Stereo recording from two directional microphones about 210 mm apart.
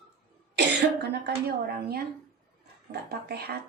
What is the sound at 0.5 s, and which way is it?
Cough, 50° right (ahead or behind).